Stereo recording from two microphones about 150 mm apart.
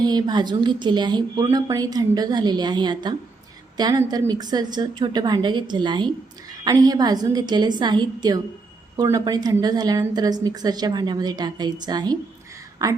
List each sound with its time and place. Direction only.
0.0 s a woman's voice: 25° right (ahead or behind)